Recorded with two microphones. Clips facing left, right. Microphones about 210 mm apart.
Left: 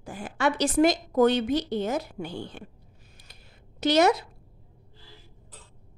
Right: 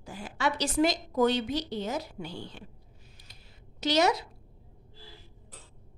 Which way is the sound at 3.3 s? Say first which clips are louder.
Left 2 dB; 55° left (ahead or behind).